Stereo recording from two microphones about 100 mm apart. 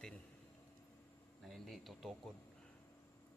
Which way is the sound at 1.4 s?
Centre (ahead or behind).